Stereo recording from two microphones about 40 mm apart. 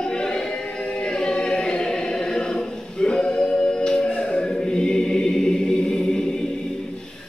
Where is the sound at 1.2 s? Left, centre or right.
Centre.